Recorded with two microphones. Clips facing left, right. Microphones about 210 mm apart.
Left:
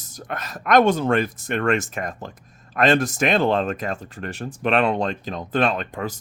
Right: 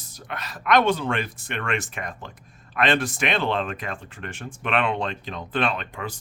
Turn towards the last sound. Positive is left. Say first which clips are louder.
# left 4 dB
turn(degrees=40)  # may be behind; listen again after turning